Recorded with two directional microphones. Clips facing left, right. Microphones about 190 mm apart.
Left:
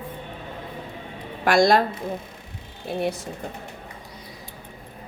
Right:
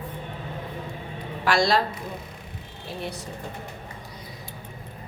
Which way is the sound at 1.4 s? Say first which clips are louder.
Left 4 dB; 50° left (ahead or behind).